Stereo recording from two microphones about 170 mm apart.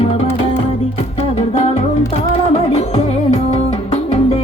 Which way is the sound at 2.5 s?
40° left (ahead or behind).